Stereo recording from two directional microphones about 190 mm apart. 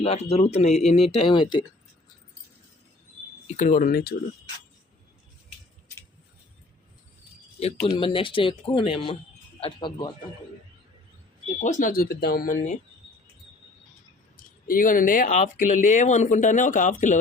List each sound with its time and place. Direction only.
0.0 s speech: 35° left (ahead or behind)
3.4 s speech: 40° left (ahead or behind)
7.9 s speech: 30° left (ahead or behind)
11.6 s speech: 40° left (ahead or behind)
14.3 s speech: 45° left (ahead or behind)